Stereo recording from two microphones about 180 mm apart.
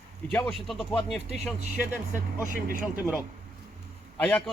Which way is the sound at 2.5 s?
50° right (ahead or behind).